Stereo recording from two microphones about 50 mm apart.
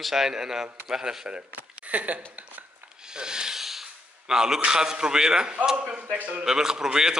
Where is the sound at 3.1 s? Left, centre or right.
Centre.